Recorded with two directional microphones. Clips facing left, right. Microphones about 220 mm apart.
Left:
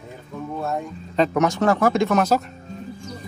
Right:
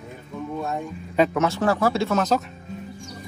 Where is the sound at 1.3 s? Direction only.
15° left (ahead or behind).